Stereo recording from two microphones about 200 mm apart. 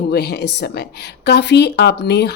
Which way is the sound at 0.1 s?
55° left (ahead or behind).